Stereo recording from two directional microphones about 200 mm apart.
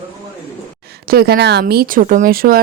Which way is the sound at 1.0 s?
50° right (ahead or behind).